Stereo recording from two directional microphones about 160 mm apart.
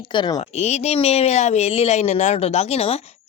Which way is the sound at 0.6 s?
45° left (ahead or behind).